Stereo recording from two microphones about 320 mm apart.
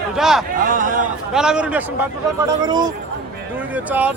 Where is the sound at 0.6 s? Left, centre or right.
Right.